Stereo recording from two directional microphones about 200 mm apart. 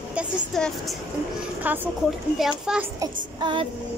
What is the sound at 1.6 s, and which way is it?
A child's voice, 10° right (ahead or behind).